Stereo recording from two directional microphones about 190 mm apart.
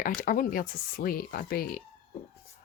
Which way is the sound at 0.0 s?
45° left (ahead or behind).